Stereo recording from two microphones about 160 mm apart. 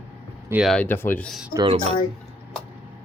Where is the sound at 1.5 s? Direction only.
35° right (ahead or behind).